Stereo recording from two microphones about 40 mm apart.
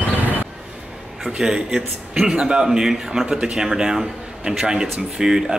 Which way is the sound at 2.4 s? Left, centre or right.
Right.